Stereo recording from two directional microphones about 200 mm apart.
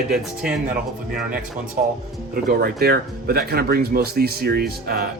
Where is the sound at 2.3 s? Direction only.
50° right (ahead or behind).